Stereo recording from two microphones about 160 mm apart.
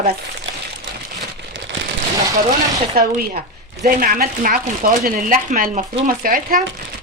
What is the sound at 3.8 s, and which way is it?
Speech, 60° right (ahead or behind).